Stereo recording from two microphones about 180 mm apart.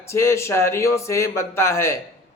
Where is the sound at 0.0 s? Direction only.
15° left (ahead or behind).